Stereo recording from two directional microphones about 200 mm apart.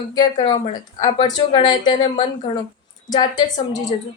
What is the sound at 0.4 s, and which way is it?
A woman's voice, 20° left (ahead or behind).